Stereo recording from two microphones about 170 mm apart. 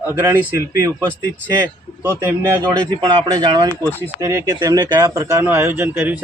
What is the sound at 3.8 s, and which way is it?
Speech, 10° left (ahead or behind).